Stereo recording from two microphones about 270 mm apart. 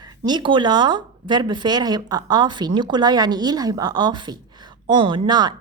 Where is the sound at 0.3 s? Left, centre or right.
Centre.